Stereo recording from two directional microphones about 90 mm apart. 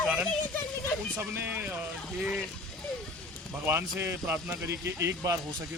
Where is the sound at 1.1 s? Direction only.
25° right (ahead or behind).